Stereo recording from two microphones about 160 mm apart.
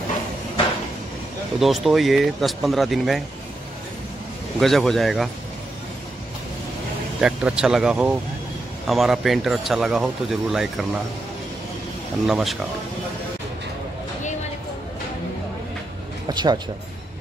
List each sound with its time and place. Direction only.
1.6 s a man's voice: centre (ahead or behind)
4.6 s a man's voice: centre (ahead or behind)
7.2 s a man's voice: 5° right (ahead or behind)
12.3 s a man's voice: 5° right (ahead or behind)
16.3 s speech: 25° right (ahead or behind)